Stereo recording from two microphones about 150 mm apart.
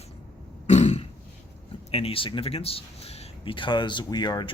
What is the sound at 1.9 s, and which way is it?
Speech, 40° left (ahead or behind).